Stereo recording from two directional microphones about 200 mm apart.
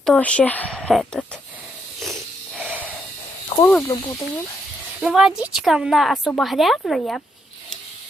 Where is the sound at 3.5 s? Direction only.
20° left (ahead or behind).